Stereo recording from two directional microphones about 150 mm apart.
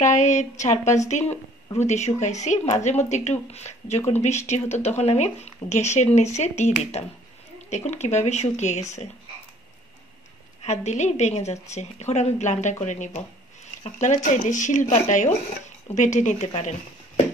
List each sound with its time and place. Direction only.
0.0 s speech: 55° left (ahead or behind)
10.6 s speech: 50° left (ahead or behind)